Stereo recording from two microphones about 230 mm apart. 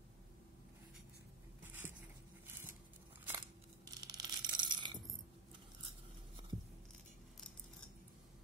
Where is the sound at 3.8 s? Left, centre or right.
Centre.